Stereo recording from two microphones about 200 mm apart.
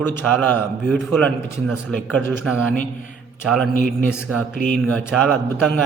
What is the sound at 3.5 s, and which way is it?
Speech, centre (ahead or behind).